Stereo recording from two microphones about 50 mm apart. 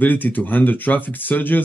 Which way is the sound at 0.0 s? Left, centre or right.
Left.